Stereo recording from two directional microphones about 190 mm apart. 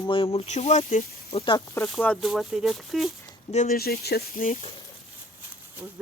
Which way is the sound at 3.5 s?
45° left (ahead or behind).